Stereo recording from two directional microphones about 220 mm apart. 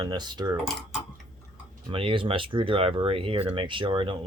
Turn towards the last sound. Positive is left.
turn(degrees=-20)  # may be behind; listen again after turning